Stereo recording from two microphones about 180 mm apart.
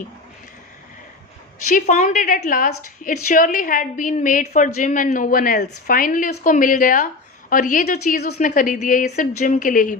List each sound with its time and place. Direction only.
1.6 s a woman's voice: 45° left (ahead or behind)
8.2 s a woman's voice: 55° left (ahead or behind)